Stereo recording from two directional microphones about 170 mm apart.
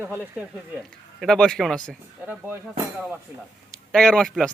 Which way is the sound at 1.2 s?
5° left (ahead or behind).